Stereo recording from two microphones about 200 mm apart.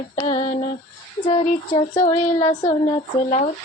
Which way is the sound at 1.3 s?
25° left (ahead or behind).